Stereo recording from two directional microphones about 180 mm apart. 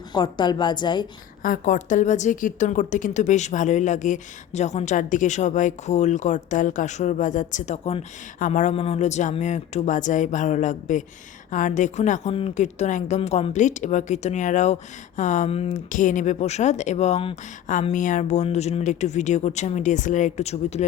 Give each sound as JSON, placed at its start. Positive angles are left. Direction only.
{"t": 0.1, "sound": "a woman's voice", "side_deg": 25}
{"t": 1.4, "sound": "a woman's voice", "side_deg": 45}